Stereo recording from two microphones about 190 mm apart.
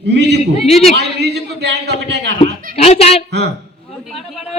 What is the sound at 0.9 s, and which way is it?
Speech, 60° right (ahead or behind).